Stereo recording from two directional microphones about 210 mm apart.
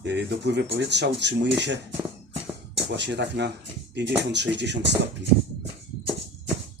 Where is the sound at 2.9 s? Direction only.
55° right (ahead or behind).